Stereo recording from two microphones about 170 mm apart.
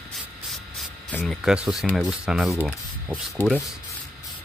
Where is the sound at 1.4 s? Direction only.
5° right (ahead or behind).